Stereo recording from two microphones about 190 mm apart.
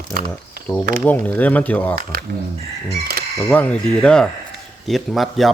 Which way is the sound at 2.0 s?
50° right (ahead or behind).